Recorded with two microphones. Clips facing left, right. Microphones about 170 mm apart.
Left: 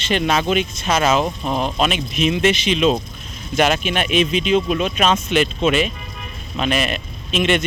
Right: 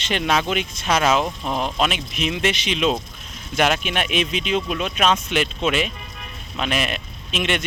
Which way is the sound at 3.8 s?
60° right (ahead or behind).